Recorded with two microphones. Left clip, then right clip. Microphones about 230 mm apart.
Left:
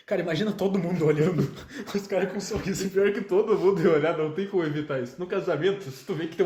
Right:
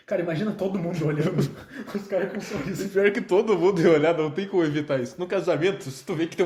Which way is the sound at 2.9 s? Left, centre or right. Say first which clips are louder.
Right 2 dB; right.